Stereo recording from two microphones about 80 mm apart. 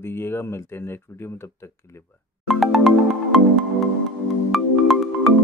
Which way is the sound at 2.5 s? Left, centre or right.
Centre.